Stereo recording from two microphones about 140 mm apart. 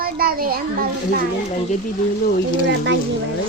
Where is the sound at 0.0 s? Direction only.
90° right.